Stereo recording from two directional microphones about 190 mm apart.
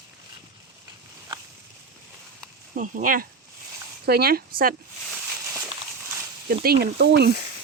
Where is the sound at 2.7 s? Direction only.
45° right (ahead or behind).